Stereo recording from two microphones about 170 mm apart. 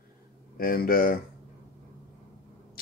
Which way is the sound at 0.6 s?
60° left (ahead or behind).